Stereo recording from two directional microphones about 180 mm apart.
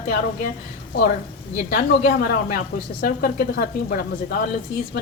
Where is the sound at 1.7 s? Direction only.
60° left (ahead or behind).